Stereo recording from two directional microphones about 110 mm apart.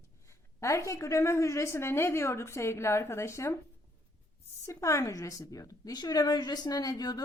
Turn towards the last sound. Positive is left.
turn(degrees=35)  # may be behind; listen again after turning